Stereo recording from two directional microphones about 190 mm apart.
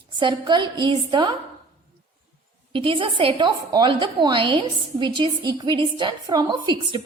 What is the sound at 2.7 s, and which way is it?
A woman's voice, 25° right (ahead or behind).